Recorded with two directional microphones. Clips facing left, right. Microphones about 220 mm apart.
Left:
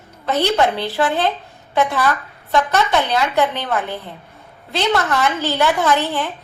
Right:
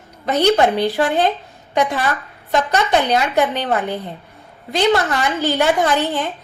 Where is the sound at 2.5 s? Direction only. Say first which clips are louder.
Even; 15° right (ahead or behind).